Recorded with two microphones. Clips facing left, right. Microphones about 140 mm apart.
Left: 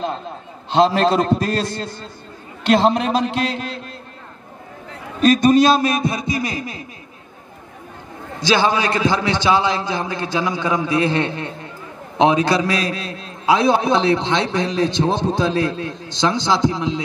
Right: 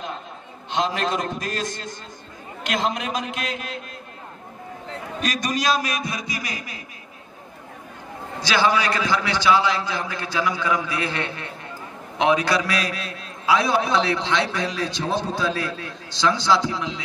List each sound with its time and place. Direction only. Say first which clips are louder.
0.7 s a man's voice: left 9 dB; 35° left (ahead or behind)
5.2 s a man's voice: left 12 dB; 30° left (ahead or behind)
8.4 s a man's voice: left 3 dB; 25° left (ahead or behind)